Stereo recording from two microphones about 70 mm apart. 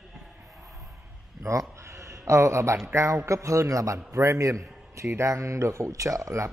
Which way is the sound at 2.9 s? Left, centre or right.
Right.